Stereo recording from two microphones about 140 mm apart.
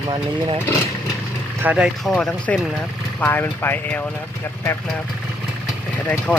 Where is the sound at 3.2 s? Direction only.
15° left (ahead or behind).